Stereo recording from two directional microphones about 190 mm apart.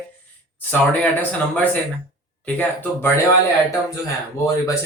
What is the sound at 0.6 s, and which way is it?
Speech, 10° left (ahead or behind).